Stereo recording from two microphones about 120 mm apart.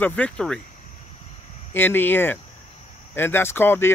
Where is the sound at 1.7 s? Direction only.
15° left (ahead or behind).